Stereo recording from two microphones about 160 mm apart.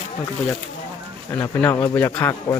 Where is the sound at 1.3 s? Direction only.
15° left (ahead or behind).